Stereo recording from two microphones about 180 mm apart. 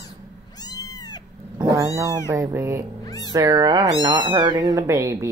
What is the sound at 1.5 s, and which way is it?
Cat, 20° right (ahead or behind).